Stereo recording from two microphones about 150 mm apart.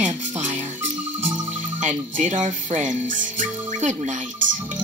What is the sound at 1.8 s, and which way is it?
Speech, 55° right (ahead or behind).